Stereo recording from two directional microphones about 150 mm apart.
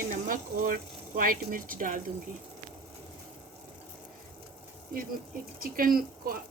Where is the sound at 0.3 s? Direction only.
65° right (ahead or behind).